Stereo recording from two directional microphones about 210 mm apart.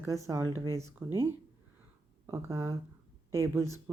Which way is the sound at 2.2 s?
15° right (ahead or behind).